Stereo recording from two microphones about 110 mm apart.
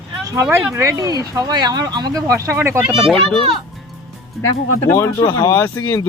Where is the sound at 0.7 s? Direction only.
30° right (ahead or behind).